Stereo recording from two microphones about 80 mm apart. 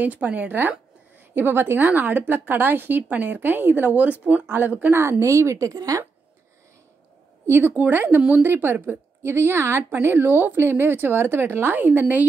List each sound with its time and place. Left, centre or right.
0.0 s a woman's voice: centre
5.2 s speech: right
7.4 s a woman's voice: right